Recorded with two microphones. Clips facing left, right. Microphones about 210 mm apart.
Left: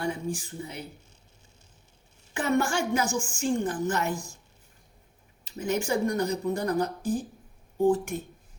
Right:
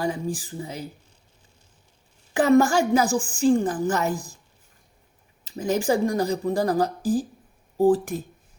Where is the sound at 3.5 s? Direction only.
90° right.